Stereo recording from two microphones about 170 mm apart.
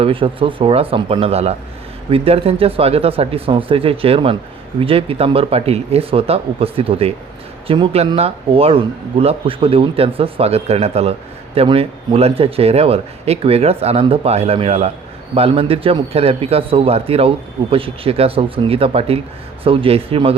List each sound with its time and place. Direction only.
0.0 s a man's voice: 30° right (ahead or behind)